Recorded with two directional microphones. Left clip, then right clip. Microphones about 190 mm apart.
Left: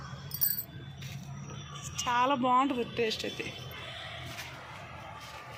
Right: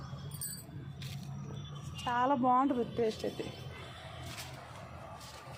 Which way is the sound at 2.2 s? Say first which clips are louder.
Left 1 dB; 15° right (ahead or behind).